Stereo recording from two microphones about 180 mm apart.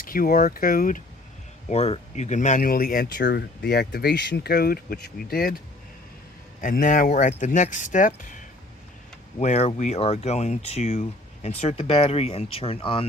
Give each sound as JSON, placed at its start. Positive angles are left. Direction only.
{"t": 0.0, "sound": "speech", "side_deg": 50}
{"t": 1.7, "sound": "speech", "side_deg": 35}
{"t": 9.4, "sound": "speech", "side_deg": 40}